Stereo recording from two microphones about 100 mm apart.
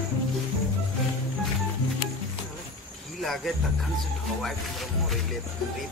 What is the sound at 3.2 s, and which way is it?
Music, centre (ahead or behind).